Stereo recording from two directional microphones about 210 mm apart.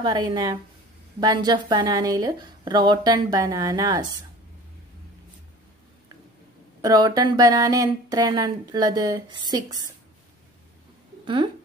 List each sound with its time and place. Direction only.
0.0 s speech: 20° right (ahead or behind)
6.8 s speech: 20° right (ahead or behind)